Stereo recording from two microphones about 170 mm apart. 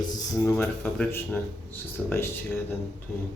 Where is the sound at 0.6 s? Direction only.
5° left (ahead or behind).